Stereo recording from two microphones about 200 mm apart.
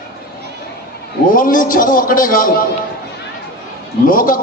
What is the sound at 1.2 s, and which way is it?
A man's voice, 45° left (ahead or behind).